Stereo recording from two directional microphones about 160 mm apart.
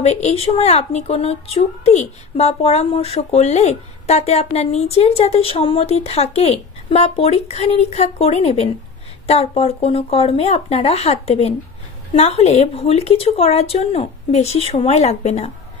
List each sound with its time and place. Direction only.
0.0 s a woman's voice: 40° left (ahead or behind)